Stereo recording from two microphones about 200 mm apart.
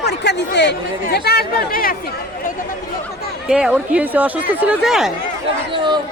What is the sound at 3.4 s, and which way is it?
Speech, 5° right (ahead or behind).